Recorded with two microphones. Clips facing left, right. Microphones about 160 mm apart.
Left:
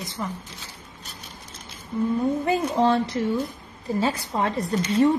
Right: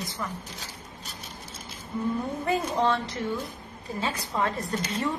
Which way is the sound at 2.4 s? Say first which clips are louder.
Left 1 dB; 30° left (ahead or behind).